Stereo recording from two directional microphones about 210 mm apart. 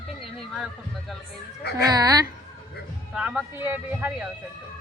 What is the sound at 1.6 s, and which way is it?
Speech, 50° left (ahead or behind).